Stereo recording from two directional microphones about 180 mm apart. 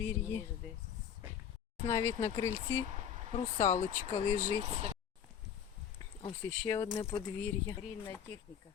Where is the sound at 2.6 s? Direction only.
35° right (ahead or behind).